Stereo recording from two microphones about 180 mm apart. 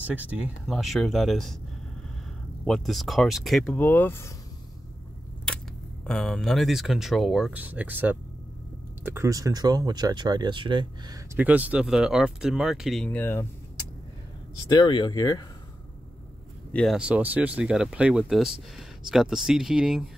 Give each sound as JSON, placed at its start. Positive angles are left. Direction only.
{"t": 0.0, "sound": "speech", "side_deg": -10}
{"t": 2.6, "sound": "speech", "side_deg": 0}
{"t": 5.5, "sound": "a sound", "side_deg": 5}
{"t": 6.0, "sound": "speech", "side_deg": 5}
{"t": 11.3, "sound": "speech", "side_deg": -10}
{"t": 14.7, "sound": "speech", "side_deg": 25}
{"t": 16.7, "sound": "speech", "side_deg": 0}